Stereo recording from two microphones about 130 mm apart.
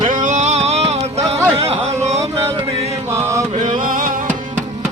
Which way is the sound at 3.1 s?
20° right (ahead or behind).